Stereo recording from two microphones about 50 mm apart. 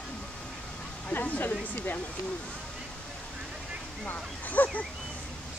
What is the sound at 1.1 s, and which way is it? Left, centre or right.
Speech, left.